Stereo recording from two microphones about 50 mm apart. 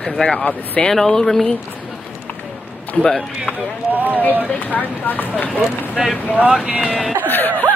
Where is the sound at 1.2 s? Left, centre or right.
Centre.